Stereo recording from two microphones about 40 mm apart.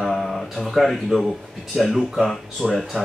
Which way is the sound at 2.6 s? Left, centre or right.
Centre.